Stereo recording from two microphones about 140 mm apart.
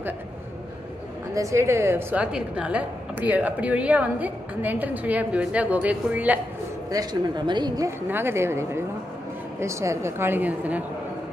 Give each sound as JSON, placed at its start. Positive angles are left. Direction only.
{"t": 1.3, "sound": "speech", "side_deg": -20}
{"t": 6.9, "sound": "speech", "side_deg": -30}
{"t": 8.1, "sound": "speech", "side_deg": -15}